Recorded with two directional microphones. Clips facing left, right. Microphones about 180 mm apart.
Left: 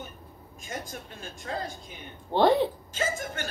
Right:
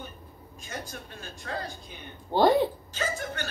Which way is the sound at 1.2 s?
25° left (ahead or behind).